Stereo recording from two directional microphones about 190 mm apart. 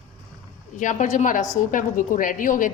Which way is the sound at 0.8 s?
40° left (ahead or behind).